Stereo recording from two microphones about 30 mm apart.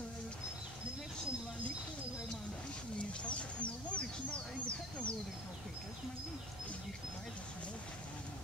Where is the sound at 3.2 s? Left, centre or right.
Left.